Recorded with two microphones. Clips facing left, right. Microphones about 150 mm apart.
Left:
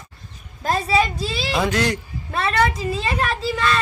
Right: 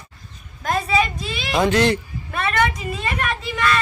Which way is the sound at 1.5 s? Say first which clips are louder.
Right 4 dB; centre (ahead or behind).